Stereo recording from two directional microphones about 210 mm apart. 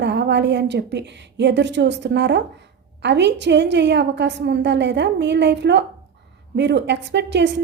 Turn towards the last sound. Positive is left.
turn(degrees=-55)  # may be behind; listen again after turning